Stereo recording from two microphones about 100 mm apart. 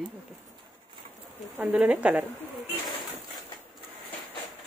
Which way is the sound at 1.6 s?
15° right (ahead or behind).